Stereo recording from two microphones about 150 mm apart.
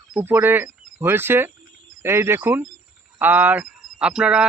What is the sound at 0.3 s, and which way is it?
Speech, 15° right (ahead or behind).